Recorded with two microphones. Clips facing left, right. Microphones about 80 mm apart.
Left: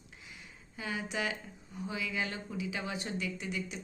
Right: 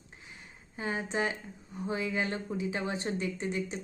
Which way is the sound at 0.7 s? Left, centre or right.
Right.